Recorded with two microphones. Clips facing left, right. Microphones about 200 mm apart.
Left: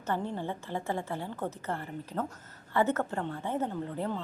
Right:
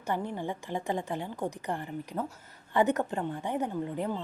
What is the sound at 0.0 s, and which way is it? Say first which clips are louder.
A woman's voice: even; 15° right (ahead or behind).